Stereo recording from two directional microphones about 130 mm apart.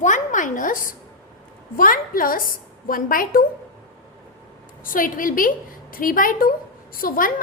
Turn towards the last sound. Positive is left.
turn(degrees=90)